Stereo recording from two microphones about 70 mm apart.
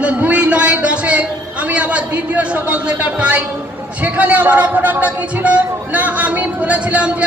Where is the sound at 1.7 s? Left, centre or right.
Centre.